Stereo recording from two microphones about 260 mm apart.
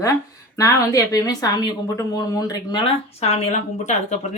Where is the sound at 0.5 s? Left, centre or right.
Centre.